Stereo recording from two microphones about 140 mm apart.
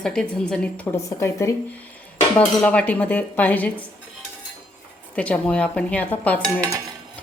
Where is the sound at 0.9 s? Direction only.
20° left (ahead or behind).